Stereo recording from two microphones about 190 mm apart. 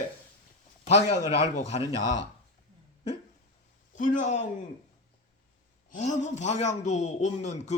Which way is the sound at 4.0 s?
45° left (ahead or behind).